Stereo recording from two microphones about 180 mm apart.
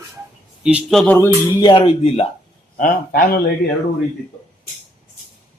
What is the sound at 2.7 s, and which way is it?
Speech, 50° left (ahead or behind).